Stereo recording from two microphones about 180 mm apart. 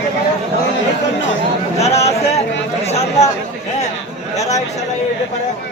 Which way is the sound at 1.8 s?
35° left (ahead or behind).